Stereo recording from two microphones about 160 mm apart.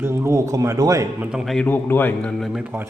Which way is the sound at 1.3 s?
Centre (ahead or behind).